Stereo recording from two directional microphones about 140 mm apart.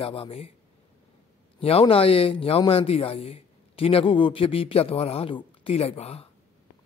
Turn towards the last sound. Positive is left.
turn(degrees=45)  # may be behind; listen again after turning